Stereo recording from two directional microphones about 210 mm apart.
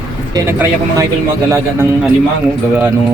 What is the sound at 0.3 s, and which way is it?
Speech, 15° right (ahead or behind).